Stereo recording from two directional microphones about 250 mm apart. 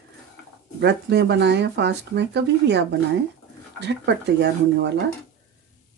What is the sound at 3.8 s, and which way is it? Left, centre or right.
Speech, right.